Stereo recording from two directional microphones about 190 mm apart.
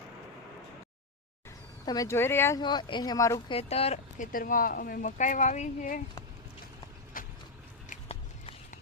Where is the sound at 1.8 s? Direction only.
20° left (ahead or behind).